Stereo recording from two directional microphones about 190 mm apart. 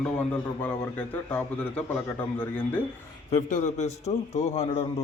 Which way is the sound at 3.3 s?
40° left (ahead or behind).